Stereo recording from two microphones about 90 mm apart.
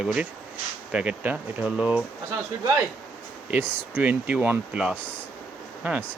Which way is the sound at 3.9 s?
20° right (ahead or behind).